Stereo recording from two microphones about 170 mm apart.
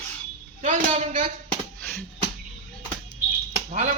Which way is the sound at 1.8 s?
5° left (ahead or behind).